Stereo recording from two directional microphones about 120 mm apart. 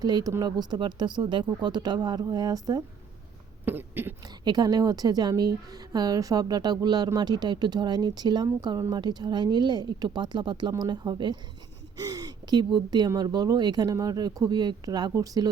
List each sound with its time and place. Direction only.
0.0 s a woman's voice: 35° right (ahead or behind)
3.7 s a sound: 15° right (ahead or behind)
4.4 s a woman's voice: 35° right (ahead or behind)